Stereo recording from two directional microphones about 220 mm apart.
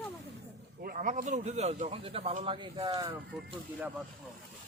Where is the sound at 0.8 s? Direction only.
40° right (ahead or behind); by 3.1 s 20° right (ahead or behind).